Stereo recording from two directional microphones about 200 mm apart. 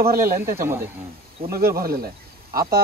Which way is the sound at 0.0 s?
45° right (ahead or behind).